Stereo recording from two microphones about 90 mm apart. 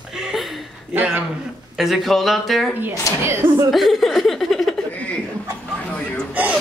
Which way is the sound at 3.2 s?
30° right (ahead or behind).